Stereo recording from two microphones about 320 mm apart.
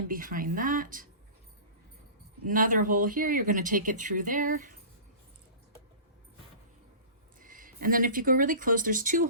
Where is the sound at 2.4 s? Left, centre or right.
Right.